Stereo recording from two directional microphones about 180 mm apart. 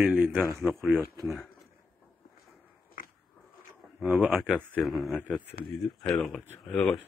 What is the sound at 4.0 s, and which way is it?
Speech, 10° right (ahead or behind).